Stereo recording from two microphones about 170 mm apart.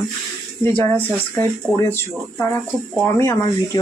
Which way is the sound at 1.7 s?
15° left (ahead or behind).